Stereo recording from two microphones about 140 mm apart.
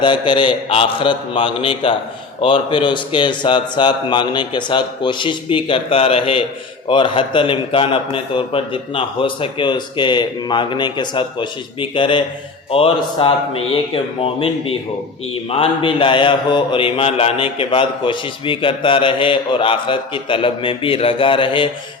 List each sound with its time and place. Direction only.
0.0 s mantra: 35° left (ahead or behind)